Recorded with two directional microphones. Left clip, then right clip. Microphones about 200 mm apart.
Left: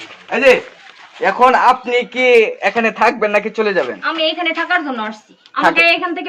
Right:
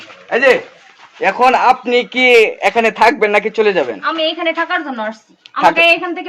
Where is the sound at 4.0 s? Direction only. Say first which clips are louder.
Even; centre (ahead or behind).